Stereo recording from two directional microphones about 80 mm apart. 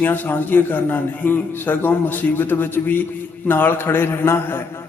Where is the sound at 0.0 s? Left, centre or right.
Left.